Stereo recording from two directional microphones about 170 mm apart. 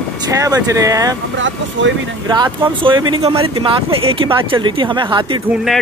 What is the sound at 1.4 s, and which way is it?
Speech, 90° right.